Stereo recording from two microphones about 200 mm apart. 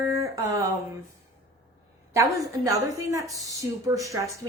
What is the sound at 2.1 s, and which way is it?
Speech, 15° right (ahead or behind).